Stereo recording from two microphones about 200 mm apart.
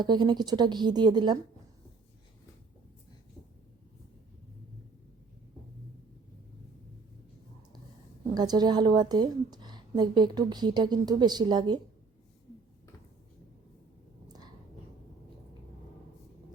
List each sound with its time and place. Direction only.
0.0 s a woman's voice: 20° right (ahead or behind)
8.4 s a woman's voice: 20° right (ahead or behind)